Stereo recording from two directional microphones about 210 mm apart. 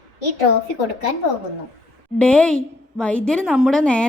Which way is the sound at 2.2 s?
5° left (ahead or behind).